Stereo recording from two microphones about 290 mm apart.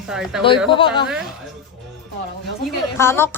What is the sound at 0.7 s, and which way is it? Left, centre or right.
Speech, centre.